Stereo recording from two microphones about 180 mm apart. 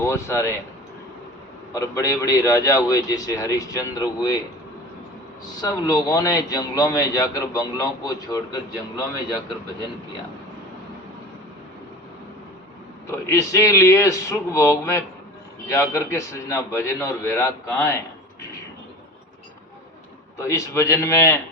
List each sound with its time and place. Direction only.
0.0 s a man's voice: 15° left (ahead or behind)
1.7 s a man's voice: 15° left (ahead or behind)
5.5 s a man's voice: 20° left (ahead or behind)
13.1 s a man's voice: 15° left (ahead or behind)
20.4 s a man's voice: 15° left (ahead or behind)